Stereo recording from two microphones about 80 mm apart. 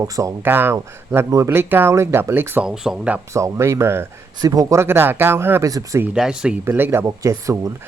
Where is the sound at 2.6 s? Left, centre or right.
Centre.